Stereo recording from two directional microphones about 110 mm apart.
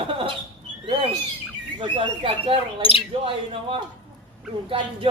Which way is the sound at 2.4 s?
55° right (ahead or behind).